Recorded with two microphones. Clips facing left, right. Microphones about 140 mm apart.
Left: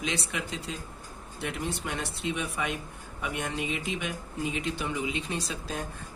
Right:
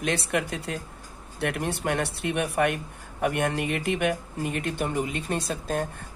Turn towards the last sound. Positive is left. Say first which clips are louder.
# right 7 dB
turn(degrees=-55)  # may be behind; listen again after turning